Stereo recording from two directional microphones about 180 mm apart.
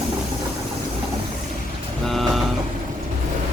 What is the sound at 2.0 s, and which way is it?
Vehicle, centre (ahead or behind).